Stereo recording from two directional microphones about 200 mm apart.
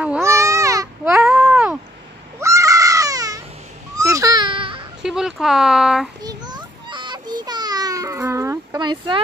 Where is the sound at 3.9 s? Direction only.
15° right (ahead or behind).